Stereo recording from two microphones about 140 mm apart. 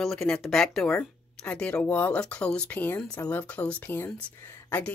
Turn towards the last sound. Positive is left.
turn(degrees=15)  # may be behind; listen again after turning